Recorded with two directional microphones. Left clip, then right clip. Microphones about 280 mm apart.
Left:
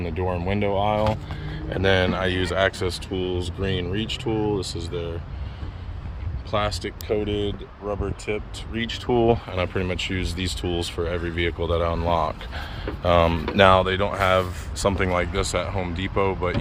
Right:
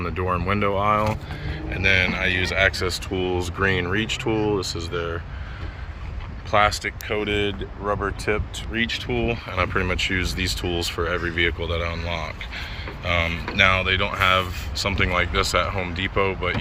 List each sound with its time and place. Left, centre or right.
0.0 s speech: centre
0.7 s speech: centre
1.0 s speech: centre
6.5 s speech: centre
7.2 s speech: right
8.7 s speech: centre
9.5 s speech: centre